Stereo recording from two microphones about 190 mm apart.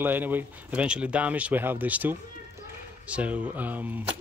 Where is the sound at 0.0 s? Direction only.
10° right (ahead or behind).